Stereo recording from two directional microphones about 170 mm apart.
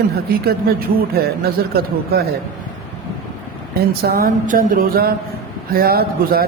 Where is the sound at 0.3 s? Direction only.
65° right (ahead or behind).